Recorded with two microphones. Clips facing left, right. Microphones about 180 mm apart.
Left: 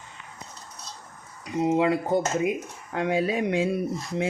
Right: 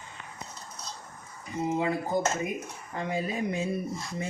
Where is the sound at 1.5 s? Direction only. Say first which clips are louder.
Left 6 dB; 80° left.